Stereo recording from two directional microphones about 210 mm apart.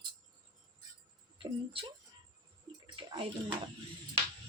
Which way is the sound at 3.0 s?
25° right (ahead or behind).